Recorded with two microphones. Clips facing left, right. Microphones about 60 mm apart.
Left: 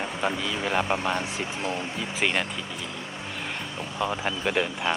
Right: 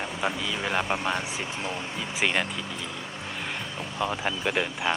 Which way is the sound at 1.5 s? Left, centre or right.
Left.